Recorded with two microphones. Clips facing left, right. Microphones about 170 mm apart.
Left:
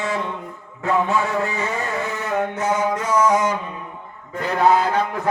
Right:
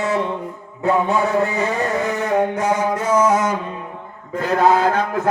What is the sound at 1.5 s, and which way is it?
Vehicle, 35° right (ahead or behind).